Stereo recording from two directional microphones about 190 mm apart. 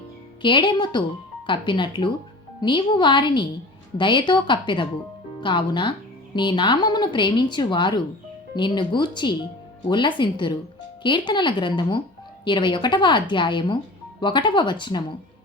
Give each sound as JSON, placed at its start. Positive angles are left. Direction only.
{"t": 0.4, "sound": "a woman's voice", "side_deg": 25}